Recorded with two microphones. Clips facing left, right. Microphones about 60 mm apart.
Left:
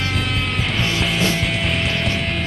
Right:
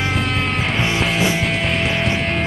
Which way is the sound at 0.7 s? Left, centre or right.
Right.